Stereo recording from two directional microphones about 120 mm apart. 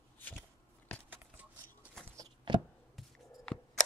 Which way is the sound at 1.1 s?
15° right (ahead or behind).